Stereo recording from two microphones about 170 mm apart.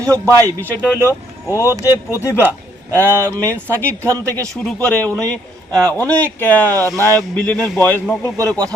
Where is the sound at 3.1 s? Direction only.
15° right (ahead or behind).